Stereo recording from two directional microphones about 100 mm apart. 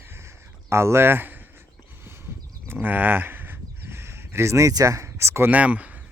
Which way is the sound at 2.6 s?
20° right (ahead or behind).